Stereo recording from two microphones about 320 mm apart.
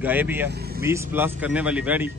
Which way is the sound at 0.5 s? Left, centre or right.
Right.